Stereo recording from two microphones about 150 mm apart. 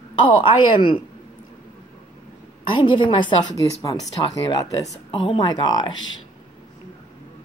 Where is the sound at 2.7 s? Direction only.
35° left (ahead or behind).